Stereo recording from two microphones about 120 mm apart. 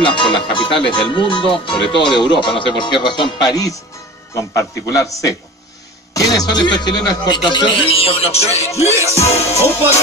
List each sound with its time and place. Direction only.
0.0 s a man's voice: 40° left (ahead or behind); by 8.8 s 60° left (ahead or behind)
9.1 s music: 60° left (ahead or behind)